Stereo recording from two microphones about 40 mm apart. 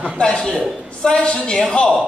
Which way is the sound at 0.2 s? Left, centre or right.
Left.